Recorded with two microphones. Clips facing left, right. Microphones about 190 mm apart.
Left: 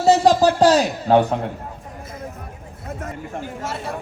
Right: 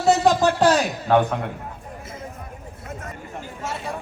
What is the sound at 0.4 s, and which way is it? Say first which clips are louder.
Speech: left 3 dB; 35° left (ahead or behind).